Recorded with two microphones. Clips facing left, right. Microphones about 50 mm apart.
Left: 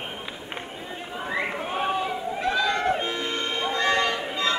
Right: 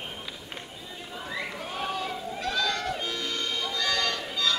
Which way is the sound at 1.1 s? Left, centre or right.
Left.